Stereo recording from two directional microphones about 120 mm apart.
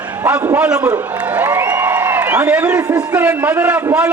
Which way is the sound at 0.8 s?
25° right (ahead or behind).